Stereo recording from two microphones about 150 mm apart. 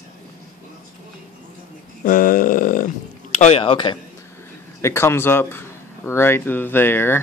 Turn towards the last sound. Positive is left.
turn(degrees=15)  # may be behind; listen again after turning